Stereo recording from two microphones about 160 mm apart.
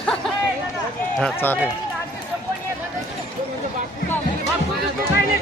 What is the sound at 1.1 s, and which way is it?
Speech, 10° left (ahead or behind).